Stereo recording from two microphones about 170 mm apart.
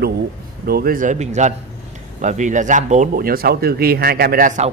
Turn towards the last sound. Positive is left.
turn(degrees=-45)  # may be behind; listen again after turning